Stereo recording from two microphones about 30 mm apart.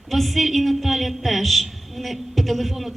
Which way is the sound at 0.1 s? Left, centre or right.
Centre.